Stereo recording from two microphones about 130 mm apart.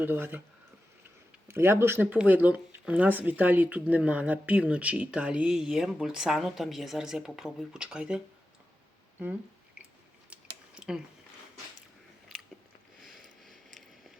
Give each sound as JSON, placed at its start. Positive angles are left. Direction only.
{"t": 0.0, "sound": "speech", "side_deg": -15}
{"t": 1.5, "sound": "speech", "side_deg": -20}
{"t": 10.8, "sound": "a sound", "side_deg": -5}